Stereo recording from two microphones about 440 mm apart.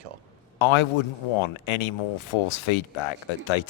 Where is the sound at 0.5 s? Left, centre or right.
Left.